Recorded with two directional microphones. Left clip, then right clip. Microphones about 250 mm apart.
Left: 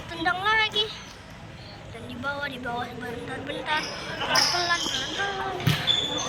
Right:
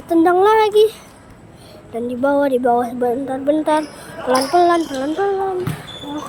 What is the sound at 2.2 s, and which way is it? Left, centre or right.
Speech, right.